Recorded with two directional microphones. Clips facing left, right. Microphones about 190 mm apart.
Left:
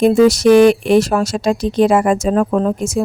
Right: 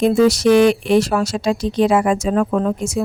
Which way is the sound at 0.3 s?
45° left (ahead or behind).